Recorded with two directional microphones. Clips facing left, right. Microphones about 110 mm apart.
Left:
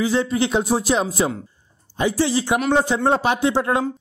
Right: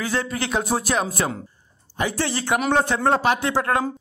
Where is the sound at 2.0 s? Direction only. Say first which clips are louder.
Left 5 dB; 15° left (ahead or behind).